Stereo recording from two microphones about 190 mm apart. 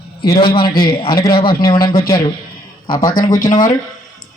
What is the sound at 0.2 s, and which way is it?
Speech, 25° left (ahead or behind).